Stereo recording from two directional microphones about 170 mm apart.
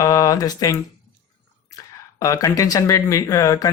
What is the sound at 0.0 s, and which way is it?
Speech, 20° left (ahead or behind).